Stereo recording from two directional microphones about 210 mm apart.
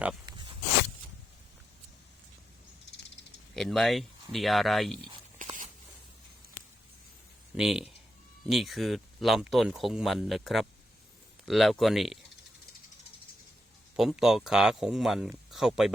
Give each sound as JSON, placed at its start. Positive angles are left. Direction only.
{"t": 0.3, "sound": "zipper", "side_deg": -20}
{"t": 3.5, "sound": "speech", "side_deg": 5}
{"t": 5.4, "sound": "a sound", "side_deg": -40}
{"t": 7.5, "sound": "speech", "side_deg": 0}
{"t": 13.9, "sound": "speech", "side_deg": 0}